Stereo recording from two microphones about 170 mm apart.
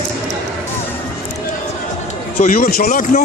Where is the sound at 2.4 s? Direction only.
50° left (ahead or behind).